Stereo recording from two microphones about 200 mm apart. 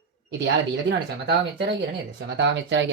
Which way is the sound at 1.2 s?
60° right (ahead or behind).